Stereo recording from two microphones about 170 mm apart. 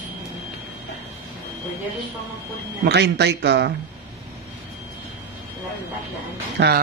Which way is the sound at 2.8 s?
80° right.